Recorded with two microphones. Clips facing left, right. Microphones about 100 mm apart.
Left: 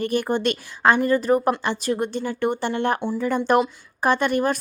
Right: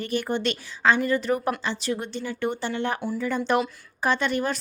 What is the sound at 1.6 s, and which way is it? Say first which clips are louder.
Speech: left 5 dB; 55° left (ahead or behind).